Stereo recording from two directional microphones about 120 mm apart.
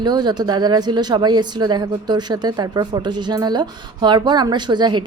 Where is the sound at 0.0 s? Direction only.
35° right (ahead or behind).